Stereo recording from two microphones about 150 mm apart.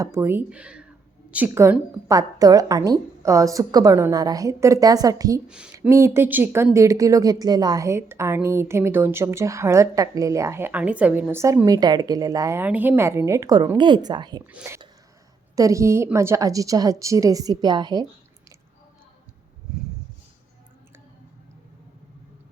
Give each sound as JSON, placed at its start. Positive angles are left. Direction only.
{"t": 0.0, "sound": "a woman's voice", "side_deg": -20}
{"t": 5.5, "sound": "a woman's voice", "side_deg": -5}
{"t": 14.5, "sound": "a woman's voice", "side_deg": -15}